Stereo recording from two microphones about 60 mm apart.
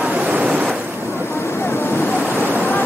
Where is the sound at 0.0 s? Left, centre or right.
Right.